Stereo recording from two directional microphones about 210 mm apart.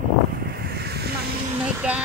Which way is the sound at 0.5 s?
50° right (ahead or behind).